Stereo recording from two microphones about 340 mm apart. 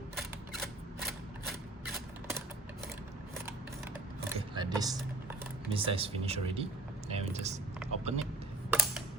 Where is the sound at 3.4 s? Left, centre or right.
Centre.